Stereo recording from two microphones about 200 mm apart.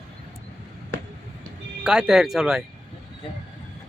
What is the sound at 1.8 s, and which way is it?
Speech, 5° right (ahead or behind).